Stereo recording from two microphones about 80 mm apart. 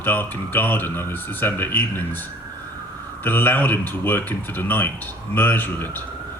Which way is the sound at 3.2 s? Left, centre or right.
Left.